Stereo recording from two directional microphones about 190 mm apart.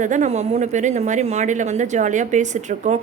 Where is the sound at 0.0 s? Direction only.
40° right (ahead or behind).